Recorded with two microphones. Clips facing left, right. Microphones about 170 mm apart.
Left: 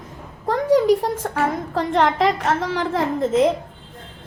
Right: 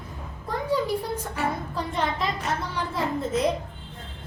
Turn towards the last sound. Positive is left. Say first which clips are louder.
# left 7 dB
turn(degrees=90)